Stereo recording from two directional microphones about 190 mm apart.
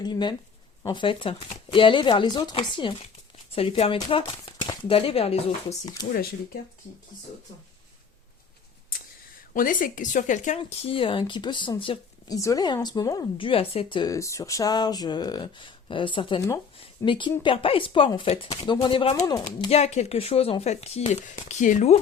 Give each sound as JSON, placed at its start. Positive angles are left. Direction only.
{"t": 0.0, "sound": "speech", "side_deg": 25}
{"t": 9.5, "sound": "speech", "side_deg": 45}
{"t": 10.6, "sound": "speech", "side_deg": 25}
{"t": 19.6, "sound": "speech", "side_deg": 35}